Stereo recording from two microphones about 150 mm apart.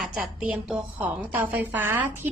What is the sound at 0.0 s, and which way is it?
A woman's voice, 5° right (ahead or behind).